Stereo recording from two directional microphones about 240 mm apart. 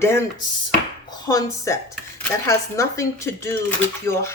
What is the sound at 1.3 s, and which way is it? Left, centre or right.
Speech, centre.